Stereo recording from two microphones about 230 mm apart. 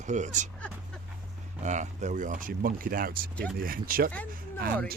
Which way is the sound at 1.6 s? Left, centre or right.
Right.